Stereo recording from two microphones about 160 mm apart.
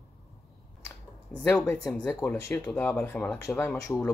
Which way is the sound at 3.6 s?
15° left (ahead or behind).